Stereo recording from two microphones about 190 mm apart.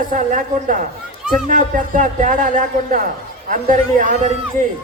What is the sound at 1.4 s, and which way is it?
Speech, 45° right (ahead or behind).